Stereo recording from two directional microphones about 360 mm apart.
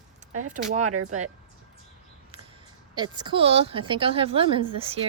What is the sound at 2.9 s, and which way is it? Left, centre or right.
A woman's voice, centre.